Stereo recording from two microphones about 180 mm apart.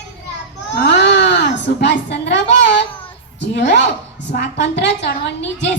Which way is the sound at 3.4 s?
75° left (ahead or behind).